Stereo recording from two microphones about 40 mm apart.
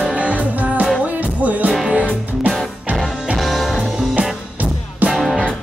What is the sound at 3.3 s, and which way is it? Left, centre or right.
Music, centre.